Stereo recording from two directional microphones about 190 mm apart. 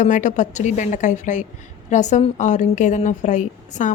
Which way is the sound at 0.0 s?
40° left (ahead or behind).